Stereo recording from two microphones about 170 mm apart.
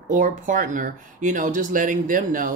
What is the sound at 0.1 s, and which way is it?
Speech, 50° right (ahead or behind).